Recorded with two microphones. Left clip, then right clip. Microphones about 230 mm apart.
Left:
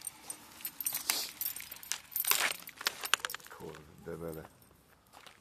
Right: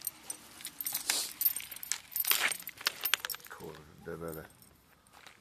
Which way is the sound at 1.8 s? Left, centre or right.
Left.